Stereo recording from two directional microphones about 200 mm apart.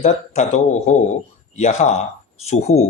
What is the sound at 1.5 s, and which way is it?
Speech, 35° left (ahead or behind).